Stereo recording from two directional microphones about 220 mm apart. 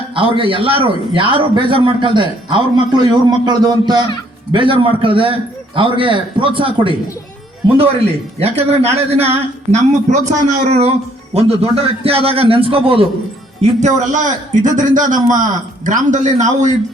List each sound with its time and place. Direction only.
0.2 s a man's voice: 25° right (ahead or behind)
8.4 s a man's voice: 30° right (ahead or behind)